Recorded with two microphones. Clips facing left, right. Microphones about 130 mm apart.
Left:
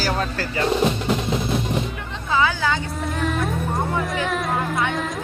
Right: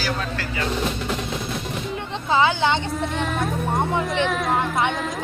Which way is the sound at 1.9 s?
30° right (ahead or behind).